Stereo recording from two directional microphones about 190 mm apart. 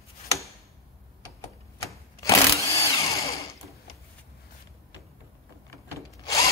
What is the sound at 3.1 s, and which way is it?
Power tool, 15° left (ahead or behind).